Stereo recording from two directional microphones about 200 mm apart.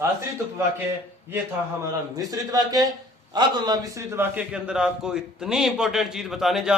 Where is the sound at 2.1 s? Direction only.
20° right (ahead or behind).